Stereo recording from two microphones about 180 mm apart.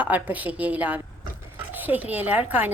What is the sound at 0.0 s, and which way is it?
Speech, 10° right (ahead or behind).